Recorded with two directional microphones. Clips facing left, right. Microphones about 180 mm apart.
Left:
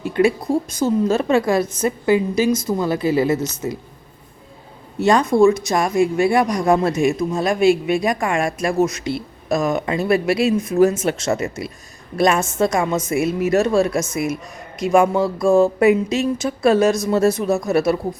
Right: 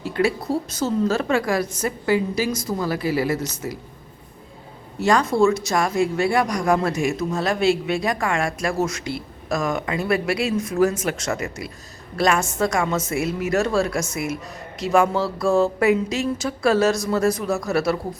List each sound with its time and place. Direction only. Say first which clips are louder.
0.0 s a sound: left 5 dB; 20° left (ahead or behind)
0.7 s speech: left 3 dB; 15° left (ahead or behind)
4.9 s speech: left 4 dB; 20° left (ahead or behind)